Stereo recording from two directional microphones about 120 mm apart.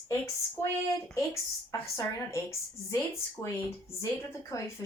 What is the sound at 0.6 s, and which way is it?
Speech, 20° left (ahead or behind).